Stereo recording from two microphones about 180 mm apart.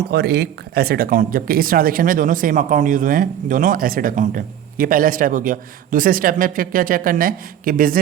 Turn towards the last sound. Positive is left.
turn(degrees=-50)  # may be behind; listen again after turning